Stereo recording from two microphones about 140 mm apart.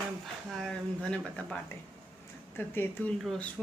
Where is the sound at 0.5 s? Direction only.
5° left (ahead or behind).